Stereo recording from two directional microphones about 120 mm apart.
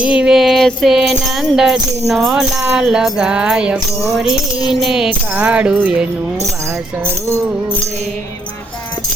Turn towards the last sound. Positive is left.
turn(degrees=-20)  # may be behind; listen again after turning